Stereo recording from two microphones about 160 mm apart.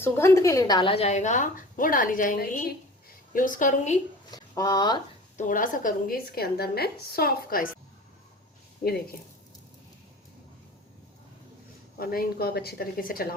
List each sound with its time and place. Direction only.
0.0 s a woman's voice: 15° left (ahead or behind); by 4.0 s 50° left (ahead or behind)
4.3 s speech: 25° left (ahead or behind)
5.4 s a woman's voice: 55° left (ahead or behind)
8.8 s a woman's voice: 60° left (ahead or behind)
11.9 s a woman's voice: 70° left (ahead or behind)